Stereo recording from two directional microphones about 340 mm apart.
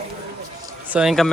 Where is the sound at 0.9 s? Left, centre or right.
Centre.